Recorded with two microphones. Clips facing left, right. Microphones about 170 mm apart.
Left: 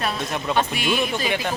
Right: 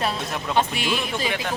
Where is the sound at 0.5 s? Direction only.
25° right (ahead or behind).